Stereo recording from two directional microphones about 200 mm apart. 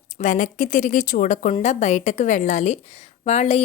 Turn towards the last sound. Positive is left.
turn(degrees=35)  # may be behind; listen again after turning